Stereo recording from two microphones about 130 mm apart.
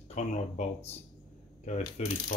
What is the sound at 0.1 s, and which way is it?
Speech, 65° left (ahead or behind).